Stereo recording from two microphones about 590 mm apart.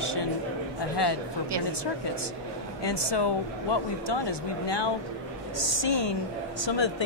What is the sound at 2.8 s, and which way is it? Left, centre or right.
Speech, left.